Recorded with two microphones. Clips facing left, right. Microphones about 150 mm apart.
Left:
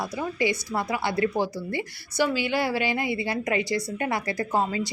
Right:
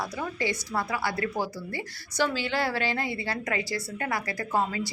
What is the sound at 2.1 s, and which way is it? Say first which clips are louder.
A woman's voice: left 3 dB; 10° left (ahead or behind).